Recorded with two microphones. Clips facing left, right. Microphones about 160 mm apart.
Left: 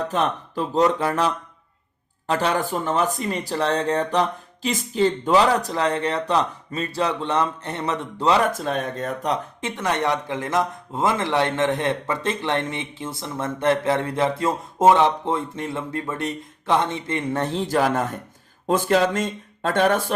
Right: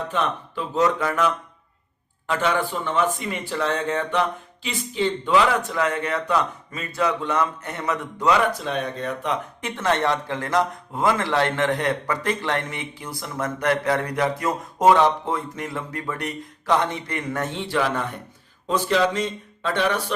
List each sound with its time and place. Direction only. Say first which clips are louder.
0.1 s speech: left 2 dB; 40° left (ahead or behind)
8.4 s a man's voice: left 1 dB; 45° left (ahead or behind)
9.6 s a man's voice: right 1 dB; 20° left (ahead or behind); by 20.1 s 50° left (ahead or behind)